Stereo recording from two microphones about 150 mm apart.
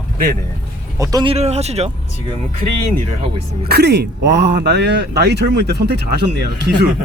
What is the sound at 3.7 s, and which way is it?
Speech, 90° right.